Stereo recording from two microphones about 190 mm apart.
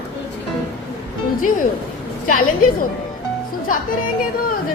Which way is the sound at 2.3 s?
50° left (ahead or behind).